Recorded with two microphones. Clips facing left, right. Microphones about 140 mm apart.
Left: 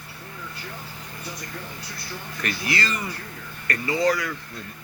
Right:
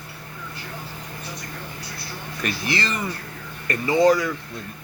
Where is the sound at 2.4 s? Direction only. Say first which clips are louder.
Right 2 dB; 25° right (ahead or behind).